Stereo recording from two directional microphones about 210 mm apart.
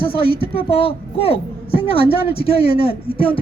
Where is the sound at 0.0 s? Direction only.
25° left (ahead or behind).